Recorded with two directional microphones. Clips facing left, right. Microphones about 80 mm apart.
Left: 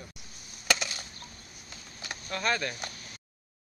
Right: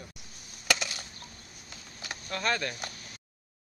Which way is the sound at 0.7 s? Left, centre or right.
Centre.